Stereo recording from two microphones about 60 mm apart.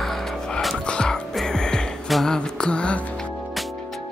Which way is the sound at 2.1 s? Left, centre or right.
Centre.